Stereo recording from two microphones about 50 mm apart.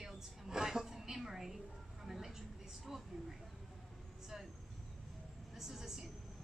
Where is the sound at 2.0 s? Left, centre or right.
Centre.